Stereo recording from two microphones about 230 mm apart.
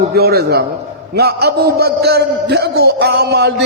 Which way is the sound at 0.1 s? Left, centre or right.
Right.